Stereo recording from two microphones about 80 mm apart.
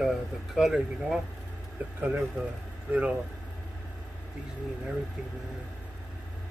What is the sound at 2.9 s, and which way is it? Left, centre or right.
Speech, centre.